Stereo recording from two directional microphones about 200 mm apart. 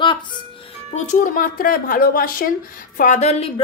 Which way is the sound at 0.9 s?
40° left (ahead or behind).